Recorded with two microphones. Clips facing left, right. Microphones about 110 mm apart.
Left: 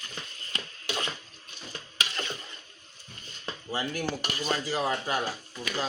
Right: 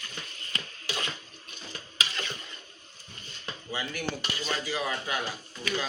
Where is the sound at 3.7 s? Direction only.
40° left (ahead or behind).